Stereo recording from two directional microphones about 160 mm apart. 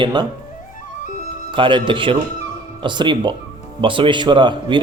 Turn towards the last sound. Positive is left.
turn(degrees=-30)  # may be behind; listen again after turning